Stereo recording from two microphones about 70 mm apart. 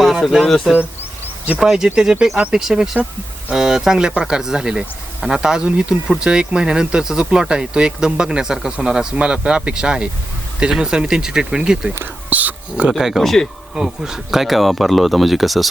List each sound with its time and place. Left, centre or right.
0.0 s speech: centre
12.3 s speech: right
13.0 s speech: centre
13.7 s speech: centre